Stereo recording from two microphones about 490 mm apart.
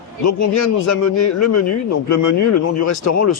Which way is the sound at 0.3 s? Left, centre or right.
Left.